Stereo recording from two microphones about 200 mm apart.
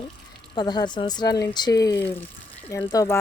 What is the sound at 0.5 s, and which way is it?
Speech, 20° left (ahead or behind).